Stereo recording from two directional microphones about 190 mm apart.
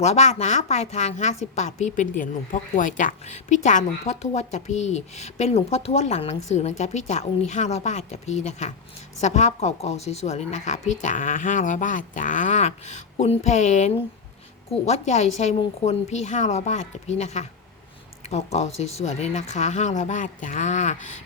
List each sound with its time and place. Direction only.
0.0 s a woman's voice: 35° left (ahead or behind)